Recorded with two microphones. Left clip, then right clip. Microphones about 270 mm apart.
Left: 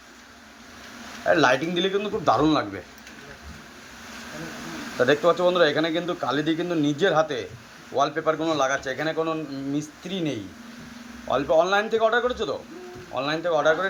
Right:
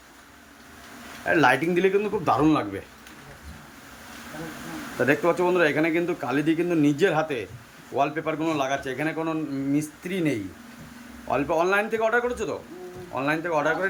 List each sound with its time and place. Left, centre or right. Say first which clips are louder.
1.3 s speech: even; centre
5.0 s speech: left 2 dB; centre
6.3 s speech: right 2 dB; centre
6.7 s speech: even; centre
7.9 s speech: left 1 dB; right
8.2 s speech: left 3 dB; centre